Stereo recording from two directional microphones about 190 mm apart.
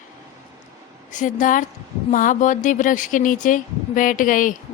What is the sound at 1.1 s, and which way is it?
A woman's voice, 40° left (ahead or behind).